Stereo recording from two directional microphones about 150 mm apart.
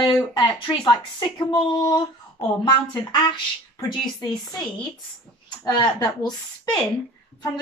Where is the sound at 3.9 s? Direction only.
25° left (ahead or behind).